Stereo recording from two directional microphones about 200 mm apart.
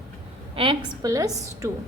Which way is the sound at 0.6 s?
25° right (ahead or behind).